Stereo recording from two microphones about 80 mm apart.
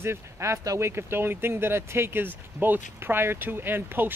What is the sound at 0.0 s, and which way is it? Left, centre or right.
Speech, right.